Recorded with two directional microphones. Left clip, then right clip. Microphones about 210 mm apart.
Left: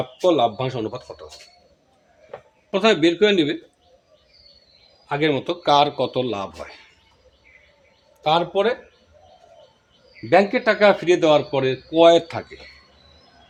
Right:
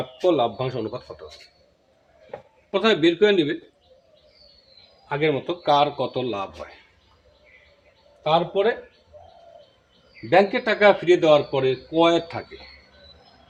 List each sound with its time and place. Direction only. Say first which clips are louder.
0.2 s speech: left 2 dB; 55° left (ahead or behind)
2.6 s speech: left 2 dB; 40° left (ahead or behind)
5.0 s speech: left 2 dB; 45° left (ahead or behind)
8.2 s speech: left 1 dB; 45° left (ahead or behind)
10.2 s speech: left 2 dB; 40° left (ahead or behind)